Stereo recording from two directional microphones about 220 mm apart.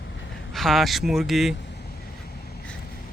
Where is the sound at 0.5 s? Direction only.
Centre (ahead or behind).